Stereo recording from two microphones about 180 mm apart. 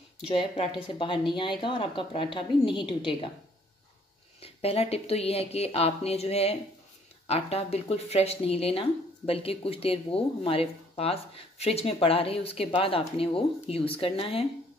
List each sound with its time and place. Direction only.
0.3 s a woman's voice: 35° left (ahead or behind)
4.4 s speech: 35° left (ahead or behind)